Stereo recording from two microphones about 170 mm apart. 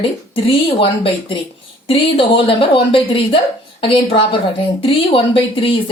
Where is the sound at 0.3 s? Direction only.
30° left (ahead or behind).